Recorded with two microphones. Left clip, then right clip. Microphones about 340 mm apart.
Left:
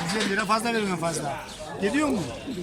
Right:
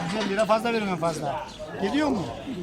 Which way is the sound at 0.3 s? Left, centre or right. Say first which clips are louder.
Right 4 dB; centre.